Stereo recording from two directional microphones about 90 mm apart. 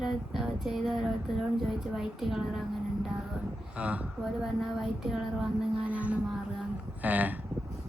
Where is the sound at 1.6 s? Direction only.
5° right (ahead or behind).